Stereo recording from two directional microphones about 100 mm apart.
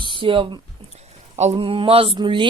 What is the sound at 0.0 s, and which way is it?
Speech, 55° right (ahead or behind).